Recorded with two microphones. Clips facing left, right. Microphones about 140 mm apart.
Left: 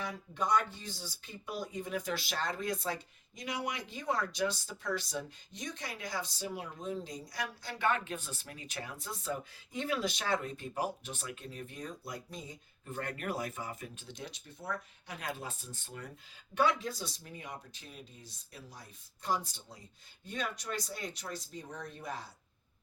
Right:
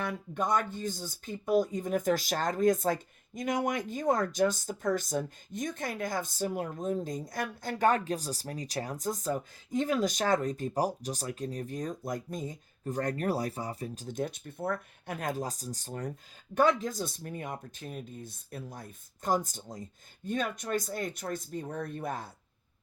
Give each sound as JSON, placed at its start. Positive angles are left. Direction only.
{"t": 0.0, "sound": "speech", "side_deg": -55}